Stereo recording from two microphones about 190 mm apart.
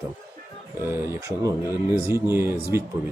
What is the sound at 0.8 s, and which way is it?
Speech, 15° right (ahead or behind).